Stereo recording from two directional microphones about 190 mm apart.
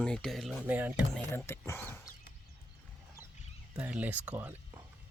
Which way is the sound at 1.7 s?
15° left (ahead or behind).